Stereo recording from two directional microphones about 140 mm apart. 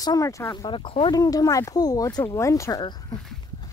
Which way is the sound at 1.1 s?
25° left (ahead or behind).